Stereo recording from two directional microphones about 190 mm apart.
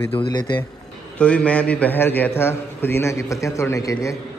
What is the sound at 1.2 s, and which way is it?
A man's voice, 5° left (ahead or behind).